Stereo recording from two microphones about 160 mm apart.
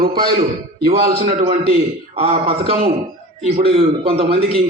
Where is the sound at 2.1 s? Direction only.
40° right (ahead or behind).